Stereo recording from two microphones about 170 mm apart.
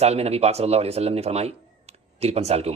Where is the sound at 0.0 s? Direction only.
40° right (ahead or behind).